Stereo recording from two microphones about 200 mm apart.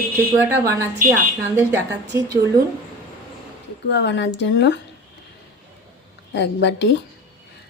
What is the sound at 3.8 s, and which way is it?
Speech, 60° left (ahead or behind).